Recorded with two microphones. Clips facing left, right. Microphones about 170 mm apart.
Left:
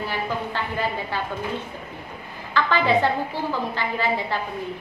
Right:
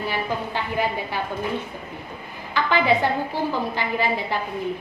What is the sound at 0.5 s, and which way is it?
Speech, 15° right (ahead or behind).